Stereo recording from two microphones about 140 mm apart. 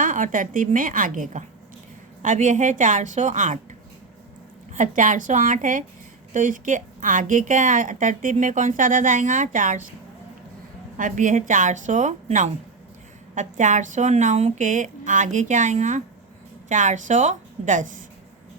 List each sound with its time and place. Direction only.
0.0 s a woman's voice: 70° right (ahead or behind)
4.7 s a woman's voice: 65° right (ahead or behind)
10.9 s a woman's voice: 65° right (ahead or behind)